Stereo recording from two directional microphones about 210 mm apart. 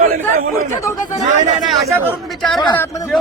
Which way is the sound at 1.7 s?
Centre (ahead or behind).